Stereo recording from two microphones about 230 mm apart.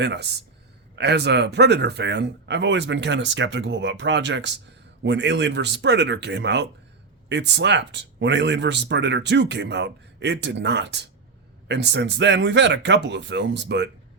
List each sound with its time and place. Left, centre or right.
0.0 s speech: right